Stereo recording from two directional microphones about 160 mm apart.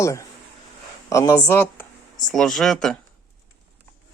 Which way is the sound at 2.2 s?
Centre (ahead or behind).